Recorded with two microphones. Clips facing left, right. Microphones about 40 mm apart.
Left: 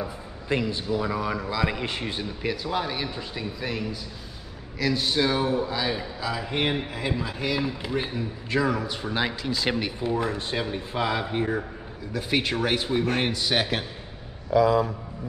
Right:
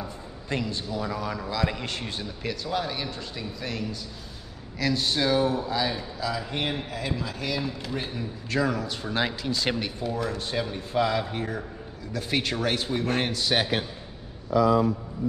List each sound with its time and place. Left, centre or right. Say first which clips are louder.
0.0 s a man's voice: left 3 dB; centre
5.9 s a man's voice: even; centre
9.9 s a man's voice: left 3 dB; left; by 13.8 s centre